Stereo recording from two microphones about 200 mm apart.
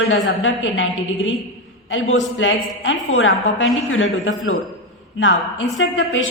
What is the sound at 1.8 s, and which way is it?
A woman's voice, 75° left (ahead or behind).